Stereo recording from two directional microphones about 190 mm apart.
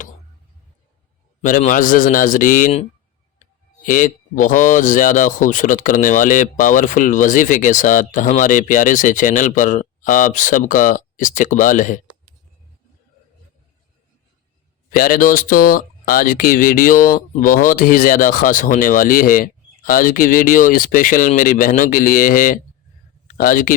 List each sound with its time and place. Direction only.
1.4 s speech: 45° left (ahead or behind)
3.8 s speech: 45° left (ahead or behind)
14.9 s speech: 45° left (ahead or behind)